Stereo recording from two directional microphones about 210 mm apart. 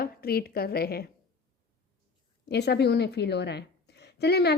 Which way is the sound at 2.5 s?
50° left (ahead or behind).